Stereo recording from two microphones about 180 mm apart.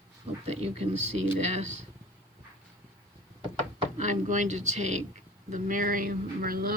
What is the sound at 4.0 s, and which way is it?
Speech, 45° right (ahead or behind).